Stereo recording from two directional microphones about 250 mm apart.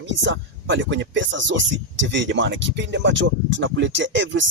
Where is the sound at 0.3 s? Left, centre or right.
Right.